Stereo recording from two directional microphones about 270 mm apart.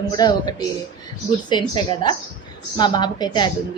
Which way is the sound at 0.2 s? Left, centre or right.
Centre.